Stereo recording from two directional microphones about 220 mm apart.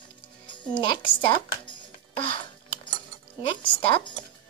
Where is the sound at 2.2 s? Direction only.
25° left (ahead or behind).